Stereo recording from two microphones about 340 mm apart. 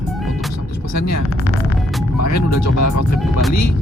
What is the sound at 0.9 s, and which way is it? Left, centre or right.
Speech, left.